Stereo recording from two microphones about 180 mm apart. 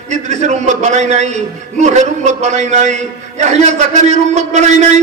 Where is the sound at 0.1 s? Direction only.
40° right (ahead or behind).